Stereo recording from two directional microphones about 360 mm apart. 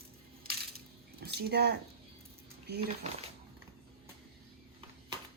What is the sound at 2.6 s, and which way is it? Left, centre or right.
Speech, right.